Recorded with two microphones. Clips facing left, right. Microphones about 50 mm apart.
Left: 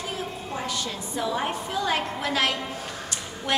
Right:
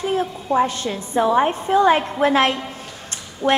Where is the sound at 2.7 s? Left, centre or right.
Right.